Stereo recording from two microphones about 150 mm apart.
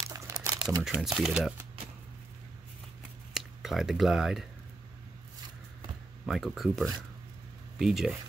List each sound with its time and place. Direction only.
0.0 s crumpling: 20° right (ahead or behind)
0.8 s speech: centre (ahead or behind)
3.3 s speech: centre (ahead or behind)
6.2 s speech: centre (ahead or behind)